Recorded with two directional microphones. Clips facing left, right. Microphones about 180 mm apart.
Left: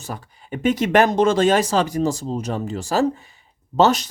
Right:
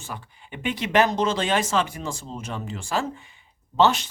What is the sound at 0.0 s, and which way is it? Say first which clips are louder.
Speech: left 5 dB; 40° left (ahead or behind).